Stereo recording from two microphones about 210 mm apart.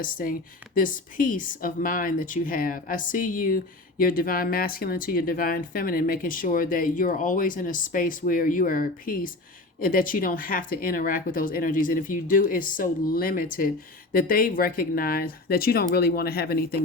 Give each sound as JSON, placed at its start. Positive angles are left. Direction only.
{"t": 0.0, "sound": "a woman's voice", "side_deg": 40}